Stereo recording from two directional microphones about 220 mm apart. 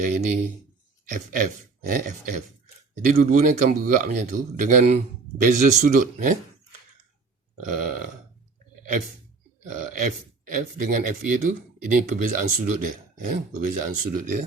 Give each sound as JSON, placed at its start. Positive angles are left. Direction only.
{"t": 0.0, "sound": "a man's voice", "side_deg": -35}
{"t": 7.6, "sound": "a man's voice", "side_deg": -35}
{"t": 9.6, "sound": "a man's voice", "side_deg": -40}